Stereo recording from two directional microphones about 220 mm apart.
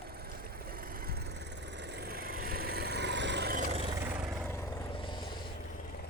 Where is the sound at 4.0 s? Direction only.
5° right (ahead or behind).